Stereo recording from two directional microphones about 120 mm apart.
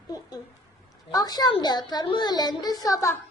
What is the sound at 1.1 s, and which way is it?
A child's voice, 35° left (ahead or behind).